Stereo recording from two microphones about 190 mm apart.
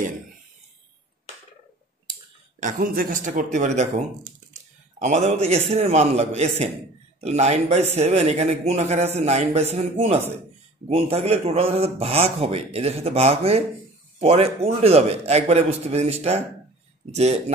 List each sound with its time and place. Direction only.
2.6 s a man's voice: 50° right (ahead or behind); by 17.4 s 35° right (ahead or behind)